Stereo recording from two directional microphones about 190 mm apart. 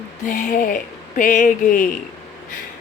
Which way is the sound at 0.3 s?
45° left (ahead or behind).